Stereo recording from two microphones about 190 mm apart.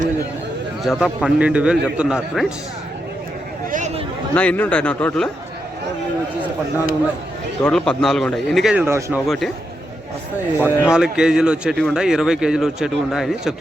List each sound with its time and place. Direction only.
0.9 s speech: centre (ahead or behind)
3.7 s a sound: 40° right (ahead or behind)
4.4 s a man's voice: 5° left (ahead or behind)
7.6 s speech: 5° left (ahead or behind); by 9.2 s 15° right (ahead or behind)
9.2 s speech: centre (ahead or behind)
10.6 s speech: 5° right (ahead or behind)